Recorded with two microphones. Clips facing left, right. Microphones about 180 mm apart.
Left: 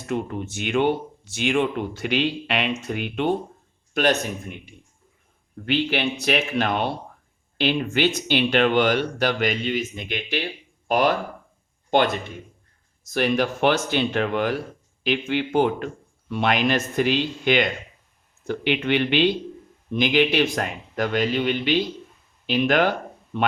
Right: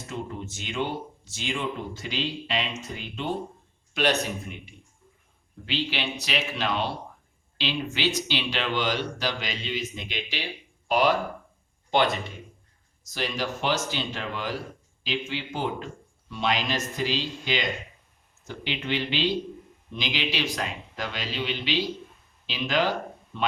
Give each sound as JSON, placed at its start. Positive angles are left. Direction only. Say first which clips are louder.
{"t": 0.0, "sound": "speech", "louder": "left 7 dB", "side_deg": 65}
{"t": 3.9, "sound": "speech", "louder": "left 4 dB", "side_deg": 50}